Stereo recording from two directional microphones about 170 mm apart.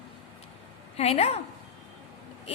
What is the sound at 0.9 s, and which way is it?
Speech, 35° left (ahead or behind).